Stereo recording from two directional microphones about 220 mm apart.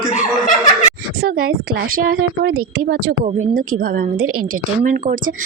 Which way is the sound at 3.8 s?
40° right (ahead or behind).